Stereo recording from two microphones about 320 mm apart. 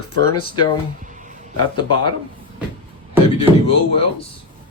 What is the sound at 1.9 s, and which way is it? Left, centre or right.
Speech, centre.